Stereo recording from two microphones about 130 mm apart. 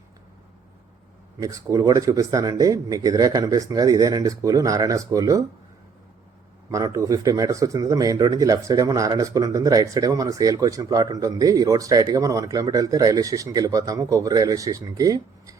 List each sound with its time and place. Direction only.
1.4 s speech: 25° right (ahead or behind)
6.7 s speech: 25° right (ahead or behind)